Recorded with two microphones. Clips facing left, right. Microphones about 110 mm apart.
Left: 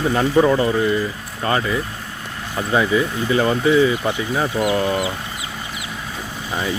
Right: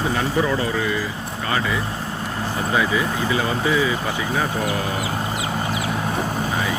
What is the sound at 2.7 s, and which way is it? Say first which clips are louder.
Speech: left 4 dB; 35° left (ahead or behind).